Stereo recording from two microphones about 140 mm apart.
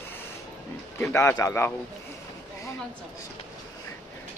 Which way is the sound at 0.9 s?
20° left (ahead or behind).